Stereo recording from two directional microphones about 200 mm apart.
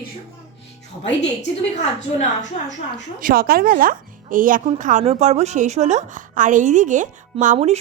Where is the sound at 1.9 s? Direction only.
35° left (ahead or behind).